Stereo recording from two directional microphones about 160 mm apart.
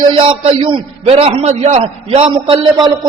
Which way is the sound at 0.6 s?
35° right (ahead or behind).